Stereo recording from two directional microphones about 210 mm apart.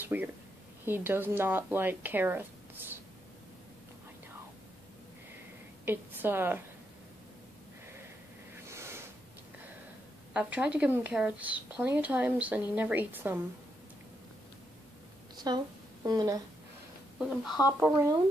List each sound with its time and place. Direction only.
0.0 s a woman's voice: 10° right (ahead or behind)
5.9 s a woman's voice: 10° right (ahead or behind)
8.6 s snort: 10° right (ahead or behind)
10.3 s a woman's voice: 5° right (ahead or behind)
15.3 s a sound: 20° right (ahead or behind)
17.6 s a woman's voice: 5° right (ahead or behind)